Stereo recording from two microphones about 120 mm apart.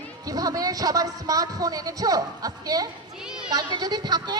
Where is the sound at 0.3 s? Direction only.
30° right (ahead or behind).